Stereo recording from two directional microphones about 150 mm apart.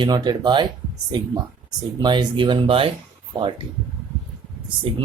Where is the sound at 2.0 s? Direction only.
30° right (ahead or behind).